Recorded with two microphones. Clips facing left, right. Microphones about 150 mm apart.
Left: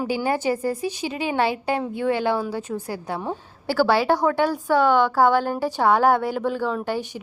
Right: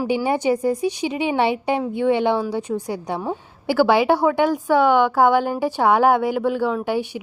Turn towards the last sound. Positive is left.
turn(degrees=-15)  # may be behind; listen again after turning